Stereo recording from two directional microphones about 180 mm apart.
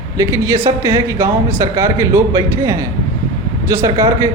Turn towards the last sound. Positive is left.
turn(degrees=-15)  # may be behind; listen again after turning